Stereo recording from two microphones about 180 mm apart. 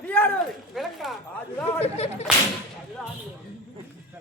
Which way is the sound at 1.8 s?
35° left (ahead or behind).